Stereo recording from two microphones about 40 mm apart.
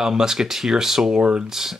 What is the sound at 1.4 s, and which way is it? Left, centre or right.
Speech, centre.